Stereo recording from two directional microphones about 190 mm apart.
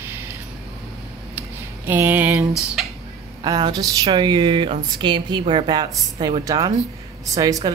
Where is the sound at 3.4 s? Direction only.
20° right (ahead or behind).